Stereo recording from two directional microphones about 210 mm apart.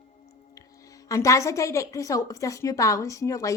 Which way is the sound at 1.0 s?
15° left (ahead or behind).